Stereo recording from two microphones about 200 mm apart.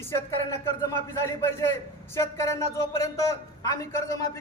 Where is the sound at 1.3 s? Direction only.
15° left (ahead or behind).